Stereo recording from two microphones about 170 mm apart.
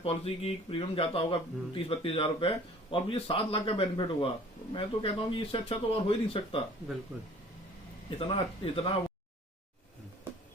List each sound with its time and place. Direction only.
0.0 s speech: 35° left (ahead or behind)
8.2 s speech: 35° left (ahead or behind)